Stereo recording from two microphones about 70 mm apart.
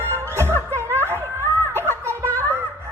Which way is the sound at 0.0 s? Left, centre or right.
Right.